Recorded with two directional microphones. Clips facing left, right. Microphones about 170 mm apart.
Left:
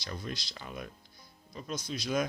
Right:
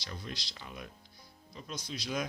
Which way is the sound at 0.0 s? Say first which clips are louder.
Left 4 dB; 50° left (ahead or behind).